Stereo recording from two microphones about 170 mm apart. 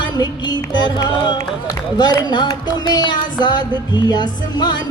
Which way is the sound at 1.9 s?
25° left (ahead or behind).